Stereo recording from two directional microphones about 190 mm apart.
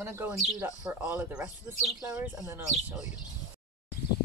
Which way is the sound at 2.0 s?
15° right (ahead or behind).